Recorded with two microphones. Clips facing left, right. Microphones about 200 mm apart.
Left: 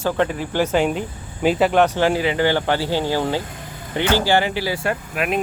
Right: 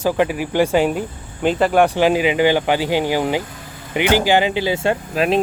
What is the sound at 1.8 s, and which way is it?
Speech, 15° right (ahead or behind).